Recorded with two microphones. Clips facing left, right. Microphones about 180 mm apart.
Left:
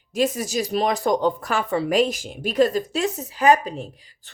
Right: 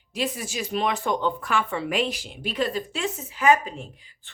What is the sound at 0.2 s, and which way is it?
Speech, 45° left (ahead or behind).